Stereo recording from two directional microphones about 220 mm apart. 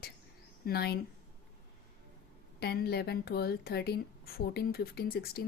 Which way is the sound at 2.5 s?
45° left (ahead or behind).